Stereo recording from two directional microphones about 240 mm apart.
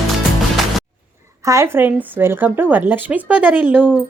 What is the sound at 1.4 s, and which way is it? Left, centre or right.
Speech, centre.